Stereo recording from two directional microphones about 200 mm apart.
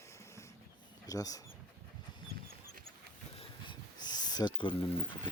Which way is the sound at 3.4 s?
20° left (ahead or behind).